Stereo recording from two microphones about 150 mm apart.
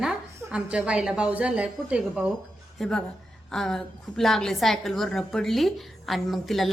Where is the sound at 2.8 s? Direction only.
5° left (ahead or behind).